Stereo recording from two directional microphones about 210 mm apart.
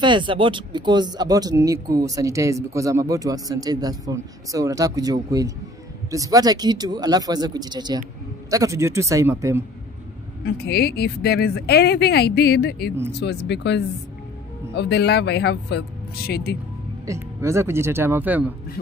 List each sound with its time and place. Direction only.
0.0 s speech: 20° right (ahead or behind)
10.4 s speech: 50° left (ahead or behind)
17.0 s speech: 15° right (ahead or behind)